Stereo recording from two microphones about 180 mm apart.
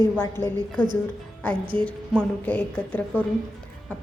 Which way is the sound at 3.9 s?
5° left (ahead or behind).